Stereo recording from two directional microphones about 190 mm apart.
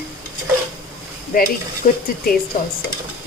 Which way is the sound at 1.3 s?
45° left (ahead or behind).